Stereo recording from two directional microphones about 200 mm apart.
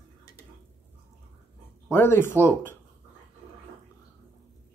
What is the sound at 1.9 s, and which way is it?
Speech, 10° left (ahead or behind).